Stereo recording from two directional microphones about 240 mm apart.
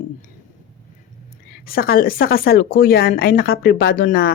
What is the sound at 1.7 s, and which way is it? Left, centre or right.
Speech, left.